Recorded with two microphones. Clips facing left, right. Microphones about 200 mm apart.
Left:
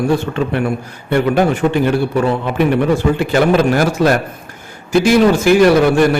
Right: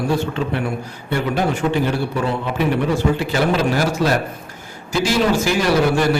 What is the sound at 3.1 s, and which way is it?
A man's voice, 55° left (ahead or behind).